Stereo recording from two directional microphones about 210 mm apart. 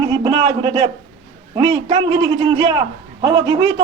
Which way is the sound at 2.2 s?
20° right (ahead or behind).